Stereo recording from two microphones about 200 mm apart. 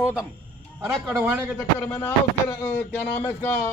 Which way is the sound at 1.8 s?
10° left (ahead or behind).